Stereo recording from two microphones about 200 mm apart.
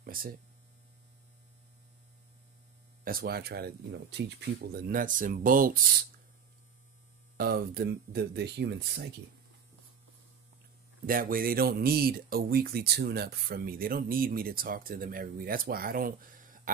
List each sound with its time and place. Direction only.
0.0 s hum: 45° right (ahead or behind)
3.0 s speech: 45° right (ahead or behind)
4.7 s speech: 45° right (ahead or behind)
7.3 s speech: 50° right (ahead or behind)
11.1 s speech: 45° right (ahead or behind)